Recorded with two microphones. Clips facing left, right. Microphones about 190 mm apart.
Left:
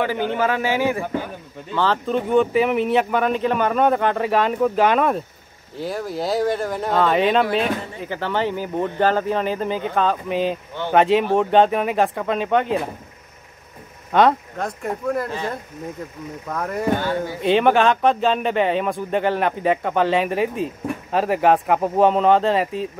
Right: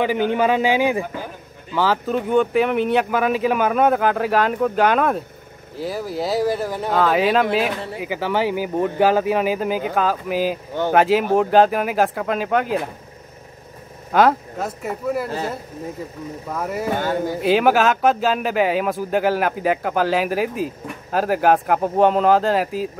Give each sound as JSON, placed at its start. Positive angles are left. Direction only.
{"t": 0.0, "sound": "a man's voice", "side_deg": -15}
{"t": 1.8, "sound": "speech", "side_deg": -5}
{"t": 14.1, "sound": "speech", "side_deg": -5}
{"t": 16.4, "sound": "speech", "side_deg": -5}